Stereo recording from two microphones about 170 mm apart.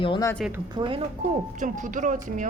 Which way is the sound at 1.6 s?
50° right (ahead or behind).